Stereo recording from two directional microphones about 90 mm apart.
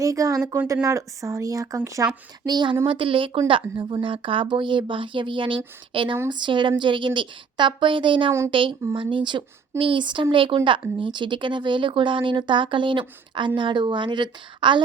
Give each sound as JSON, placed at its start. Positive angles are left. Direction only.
{"t": 0.0, "sound": "speech", "side_deg": -40}
{"t": 2.5, "sound": "a woman's voice", "side_deg": -55}
{"t": 2.8, "sound": "a woman's voice", "side_deg": -75}
{"t": 6.2, "sound": "a woman's voice", "side_deg": -60}
{"t": 10.3, "sound": "speech", "side_deg": -75}